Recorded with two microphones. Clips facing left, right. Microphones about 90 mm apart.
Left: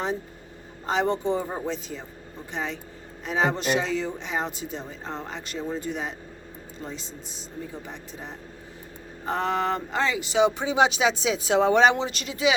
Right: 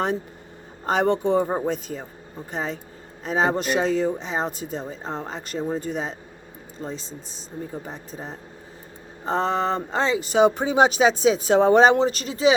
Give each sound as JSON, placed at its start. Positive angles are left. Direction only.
{"t": 0.9, "sound": "speech", "side_deg": -55}
{"t": 10.2, "sound": "speech", "side_deg": -45}